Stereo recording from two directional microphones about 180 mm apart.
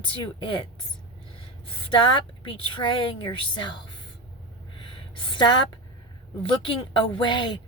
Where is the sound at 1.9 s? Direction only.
30° left (ahead or behind).